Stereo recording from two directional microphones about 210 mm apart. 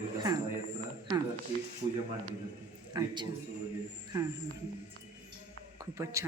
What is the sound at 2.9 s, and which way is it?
Speech, 20° right (ahead or behind).